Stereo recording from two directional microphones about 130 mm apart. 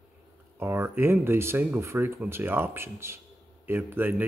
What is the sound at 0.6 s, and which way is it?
Speech, 20° right (ahead or behind).